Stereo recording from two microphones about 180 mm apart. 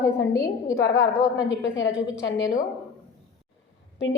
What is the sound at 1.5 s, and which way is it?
Speech, 90° left.